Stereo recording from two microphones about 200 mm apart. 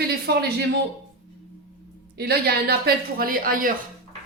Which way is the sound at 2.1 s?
50° right (ahead or behind).